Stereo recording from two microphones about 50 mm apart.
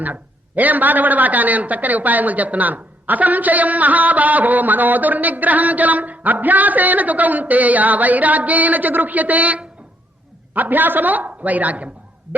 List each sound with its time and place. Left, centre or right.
0.0 s a man's voice: right